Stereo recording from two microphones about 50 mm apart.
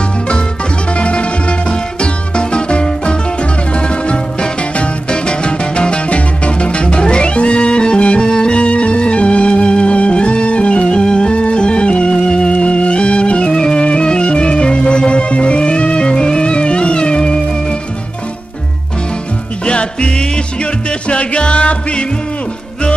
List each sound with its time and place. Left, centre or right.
0.9 s music: left
19.6 s music: left